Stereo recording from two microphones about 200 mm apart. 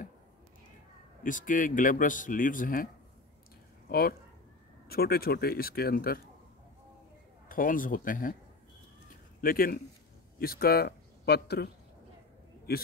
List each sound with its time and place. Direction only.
1.2 s a man's voice: 40° left (ahead or behind)
4.8 s speech: 50° left (ahead or behind)
7.4 s speech: 45° left (ahead or behind)
9.4 s speech: 45° left (ahead or behind)